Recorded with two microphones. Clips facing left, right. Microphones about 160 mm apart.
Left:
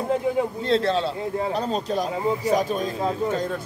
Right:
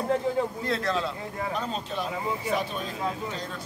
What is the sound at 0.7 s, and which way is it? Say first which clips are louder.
Speech: left 6 dB; 30° left (ahead or behind).